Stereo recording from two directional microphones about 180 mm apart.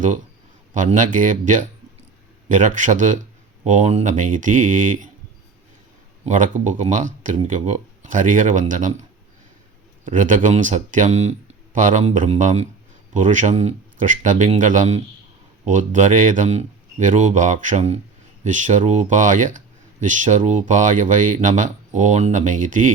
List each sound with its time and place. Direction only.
0.7 s speech: 45° right (ahead or behind)
6.2 s speech: 45° right (ahead or behind)
10.1 s speech: 45° right (ahead or behind)